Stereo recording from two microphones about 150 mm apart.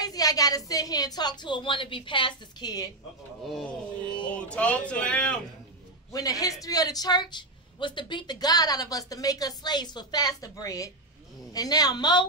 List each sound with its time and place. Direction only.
0.0 s a woman's voice: 25° left (ahead or behind)
3.4 s speech: centre (ahead or behind)
6.1 s a woman's voice: 25° left (ahead or behind)